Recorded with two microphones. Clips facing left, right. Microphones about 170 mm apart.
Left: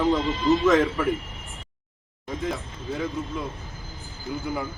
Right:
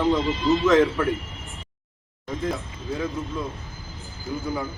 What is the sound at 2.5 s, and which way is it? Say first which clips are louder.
Speech: right 2 dB; centre (ahead or behind).